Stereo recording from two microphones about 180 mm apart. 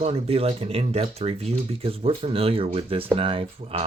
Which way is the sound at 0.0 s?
35° right (ahead or behind).